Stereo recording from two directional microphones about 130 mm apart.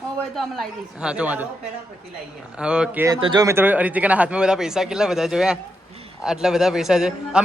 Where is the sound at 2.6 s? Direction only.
5° right (ahead or behind).